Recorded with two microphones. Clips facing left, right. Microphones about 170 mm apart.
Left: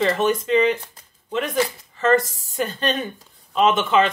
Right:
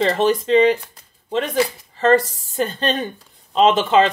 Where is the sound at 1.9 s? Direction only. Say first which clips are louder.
Right 3 dB; 30° right (ahead or behind).